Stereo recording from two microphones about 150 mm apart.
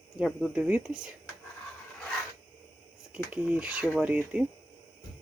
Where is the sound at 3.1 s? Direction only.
10° right (ahead or behind).